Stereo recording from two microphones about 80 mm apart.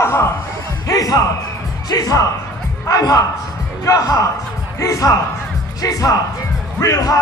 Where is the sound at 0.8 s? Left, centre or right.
Left.